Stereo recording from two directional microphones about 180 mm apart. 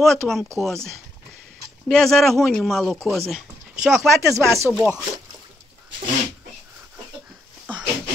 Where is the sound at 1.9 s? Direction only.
5° left (ahead or behind).